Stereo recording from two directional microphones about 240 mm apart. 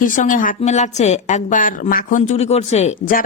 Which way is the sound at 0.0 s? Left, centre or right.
Left.